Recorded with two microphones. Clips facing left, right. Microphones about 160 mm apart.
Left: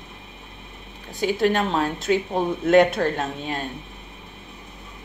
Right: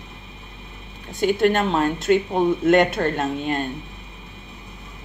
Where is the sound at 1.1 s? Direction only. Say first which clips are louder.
Right 2 dB; centre (ahead or behind).